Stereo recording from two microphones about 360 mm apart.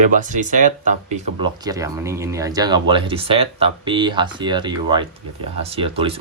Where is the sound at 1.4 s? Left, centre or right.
Centre.